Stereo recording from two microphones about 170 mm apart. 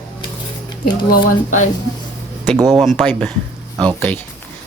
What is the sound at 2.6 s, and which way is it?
Speech, centre (ahead or behind).